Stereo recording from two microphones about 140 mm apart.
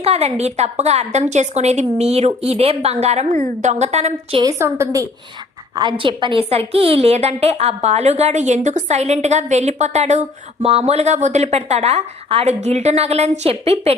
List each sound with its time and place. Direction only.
0.0 s a woman's voice: 50° right (ahead or behind)
4.5 s a woman's voice: 20° right (ahead or behind)
5.7 s a woman's voice: 35° right (ahead or behind)